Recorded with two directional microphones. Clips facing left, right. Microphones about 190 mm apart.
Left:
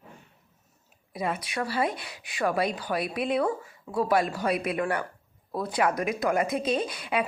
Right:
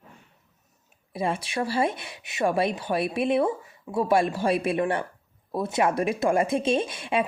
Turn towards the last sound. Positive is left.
turn(degrees=-25)  # may be behind; listen again after turning